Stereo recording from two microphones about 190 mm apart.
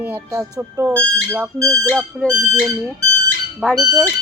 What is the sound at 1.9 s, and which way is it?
Speech, centre (ahead or behind).